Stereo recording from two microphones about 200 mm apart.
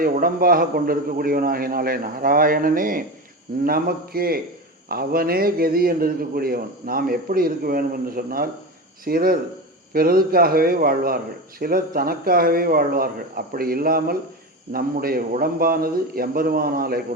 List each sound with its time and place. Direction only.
0.0 s a man's voice: 45° right (ahead or behind)